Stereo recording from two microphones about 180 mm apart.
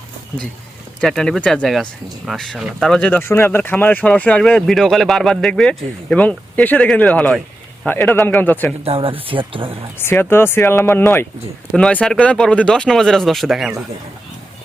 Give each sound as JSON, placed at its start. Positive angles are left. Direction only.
{"t": 1.0, "sound": "speech", "side_deg": 5}
{"t": 8.8, "sound": "speech", "side_deg": -30}
{"t": 10.0, "sound": "speech", "side_deg": 10}